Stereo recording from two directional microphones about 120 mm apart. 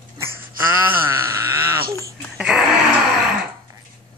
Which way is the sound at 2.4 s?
5° right (ahead or behind).